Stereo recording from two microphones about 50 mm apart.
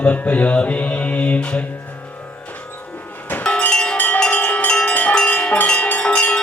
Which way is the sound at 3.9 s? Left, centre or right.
Left.